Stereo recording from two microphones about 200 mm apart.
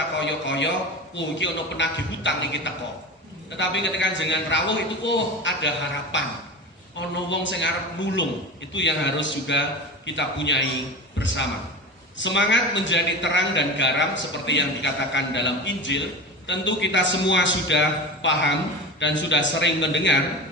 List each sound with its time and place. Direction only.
0.2 s a man's voice: 65° left (ahead or behind)
7.3 s a man's voice: 65° left (ahead or behind)
12.1 s a man's voice: 65° left (ahead or behind)